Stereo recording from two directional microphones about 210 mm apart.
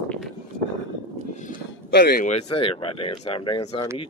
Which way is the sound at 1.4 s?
40° left (ahead or behind).